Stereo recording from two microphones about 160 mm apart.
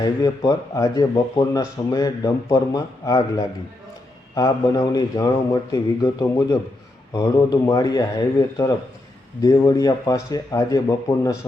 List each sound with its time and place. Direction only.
0.0 s speech: 25° left (ahead or behind)